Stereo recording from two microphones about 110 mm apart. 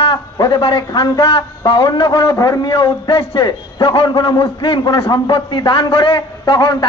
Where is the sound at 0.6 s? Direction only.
45° left (ahead or behind).